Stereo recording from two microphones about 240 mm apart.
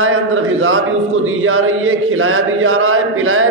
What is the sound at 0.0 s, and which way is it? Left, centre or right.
Speech, right.